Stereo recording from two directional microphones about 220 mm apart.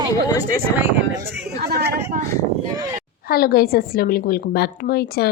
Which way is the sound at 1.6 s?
50° right (ahead or behind).